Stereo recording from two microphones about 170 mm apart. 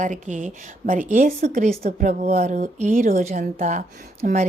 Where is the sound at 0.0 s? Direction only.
50° right (ahead or behind).